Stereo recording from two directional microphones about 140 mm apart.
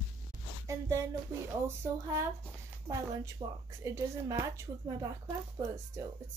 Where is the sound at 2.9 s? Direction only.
25° right (ahead or behind).